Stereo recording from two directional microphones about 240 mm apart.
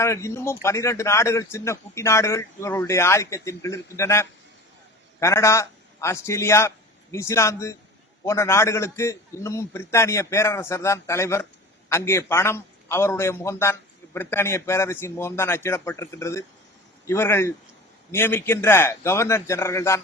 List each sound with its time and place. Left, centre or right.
0.0 s a man's voice: centre